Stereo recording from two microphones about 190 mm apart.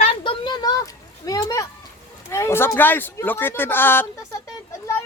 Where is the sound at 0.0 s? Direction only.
30° left (ahead or behind).